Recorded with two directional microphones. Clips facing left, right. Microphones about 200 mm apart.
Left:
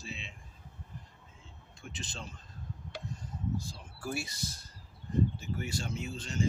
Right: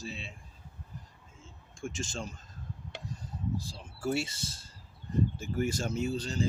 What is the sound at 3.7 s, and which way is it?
Speech, 25° right (ahead or behind).